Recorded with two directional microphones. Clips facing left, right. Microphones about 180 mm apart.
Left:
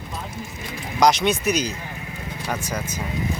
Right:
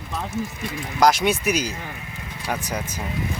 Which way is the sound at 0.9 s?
5° right (ahead or behind).